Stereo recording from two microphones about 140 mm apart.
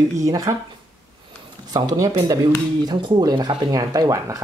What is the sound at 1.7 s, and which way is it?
Speech, 30° right (ahead or behind).